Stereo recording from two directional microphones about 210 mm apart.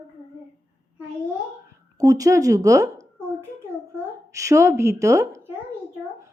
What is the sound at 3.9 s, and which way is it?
A woman's voice, 15° right (ahead or behind).